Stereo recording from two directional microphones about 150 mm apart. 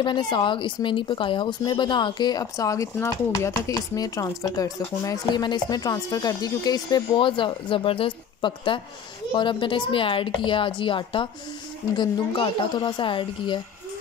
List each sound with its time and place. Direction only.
0.0 s a woman's voice: 30° left (ahead or behind)